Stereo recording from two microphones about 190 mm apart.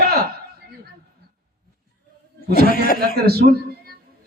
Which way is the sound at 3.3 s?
55° right (ahead or behind).